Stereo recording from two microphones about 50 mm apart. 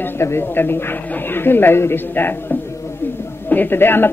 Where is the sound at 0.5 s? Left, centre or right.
Left.